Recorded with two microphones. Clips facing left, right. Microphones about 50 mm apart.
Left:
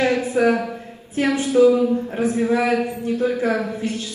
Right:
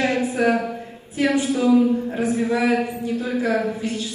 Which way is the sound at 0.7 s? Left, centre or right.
Left.